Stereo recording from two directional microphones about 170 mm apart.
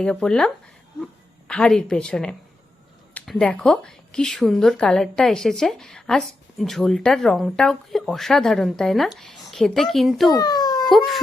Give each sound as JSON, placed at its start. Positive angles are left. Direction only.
{"t": 0.0, "sound": "a woman's voice", "side_deg": 5}
{"t": 10.3, "sound": "a sound", "side_deg": 25}
{"t": 10.8, "sound": "baby cry", "side_deg": 0}